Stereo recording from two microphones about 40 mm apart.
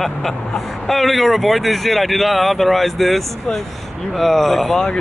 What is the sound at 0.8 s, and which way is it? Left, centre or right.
Speech, centre.